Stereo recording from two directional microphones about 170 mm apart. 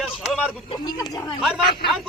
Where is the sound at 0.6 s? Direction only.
20° left (ahead or behind).